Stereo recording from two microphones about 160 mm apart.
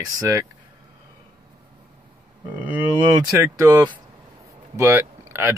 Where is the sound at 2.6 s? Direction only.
15° right (ahead or behind).